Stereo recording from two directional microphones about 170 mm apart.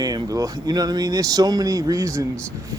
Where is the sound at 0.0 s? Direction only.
20° right (ahead or behind).